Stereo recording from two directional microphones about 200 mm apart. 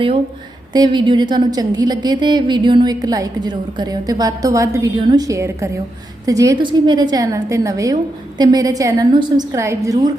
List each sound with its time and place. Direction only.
0.7 s a woman's voice: 20° right (ahead or behind)